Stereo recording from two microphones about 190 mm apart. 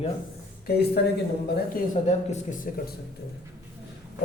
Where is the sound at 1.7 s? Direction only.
35° left (ahead or behind).